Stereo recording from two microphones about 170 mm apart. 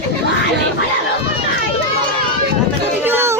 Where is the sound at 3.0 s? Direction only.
15° right (ahead or behind).